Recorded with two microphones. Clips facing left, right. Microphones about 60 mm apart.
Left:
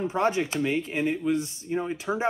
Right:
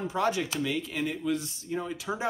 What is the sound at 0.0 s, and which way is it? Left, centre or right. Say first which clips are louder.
Speech: left 3 dB; left.